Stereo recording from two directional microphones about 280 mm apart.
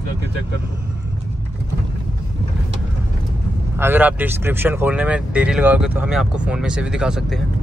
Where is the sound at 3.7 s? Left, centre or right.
Centre.